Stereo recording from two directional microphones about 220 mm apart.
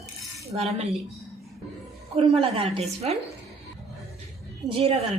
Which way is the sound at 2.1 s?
25° right (ahead or behind).